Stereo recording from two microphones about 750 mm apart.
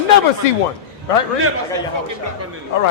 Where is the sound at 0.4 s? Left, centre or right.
Left.